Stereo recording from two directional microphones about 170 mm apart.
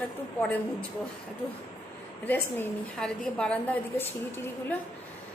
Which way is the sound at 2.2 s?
10° left (ahead or behind).